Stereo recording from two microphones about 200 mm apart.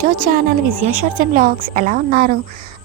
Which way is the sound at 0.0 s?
45° right (ahead or behind).